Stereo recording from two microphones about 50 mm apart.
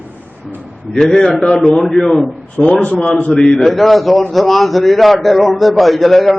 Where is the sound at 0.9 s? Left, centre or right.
Centre.